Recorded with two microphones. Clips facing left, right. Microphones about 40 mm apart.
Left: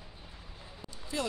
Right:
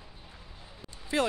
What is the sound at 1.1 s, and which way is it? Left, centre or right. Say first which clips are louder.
Speech: right 7 dB; right.